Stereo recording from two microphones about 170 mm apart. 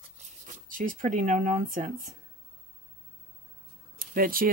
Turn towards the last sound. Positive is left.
turn(degrees=-55)  # may be behind; listen again after turning